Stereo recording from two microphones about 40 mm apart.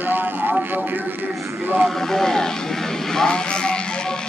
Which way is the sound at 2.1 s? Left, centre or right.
Centre.